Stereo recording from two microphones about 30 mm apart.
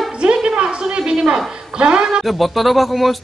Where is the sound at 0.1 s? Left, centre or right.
Right.